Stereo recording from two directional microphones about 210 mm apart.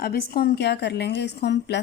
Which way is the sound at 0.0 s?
50° left (ahead or behind).